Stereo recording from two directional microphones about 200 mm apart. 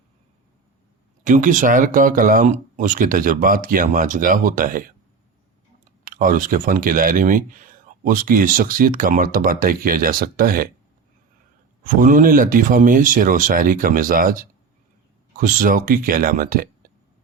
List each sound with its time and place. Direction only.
1.2 s speech: 40° right (ahead or behind)
6.1 s speech: 45° right (ahead or behind)
11.8 s speech: 40° right (ahead or behind)